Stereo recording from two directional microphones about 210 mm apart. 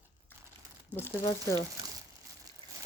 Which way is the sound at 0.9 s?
10° right (ahead or behind).